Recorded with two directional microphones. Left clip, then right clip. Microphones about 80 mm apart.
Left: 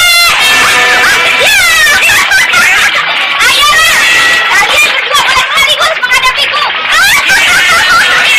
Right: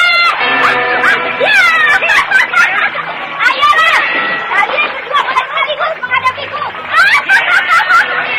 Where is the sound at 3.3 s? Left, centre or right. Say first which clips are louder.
Left 2 dB; left.